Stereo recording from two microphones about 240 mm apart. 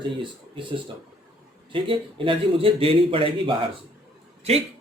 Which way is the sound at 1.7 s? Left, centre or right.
Right.